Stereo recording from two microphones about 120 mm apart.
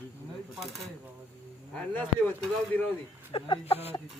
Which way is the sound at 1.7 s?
15° left (ahead or behind).